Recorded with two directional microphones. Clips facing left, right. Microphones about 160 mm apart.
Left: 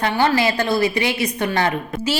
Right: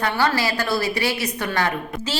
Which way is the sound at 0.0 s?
20° left (ahead or behind).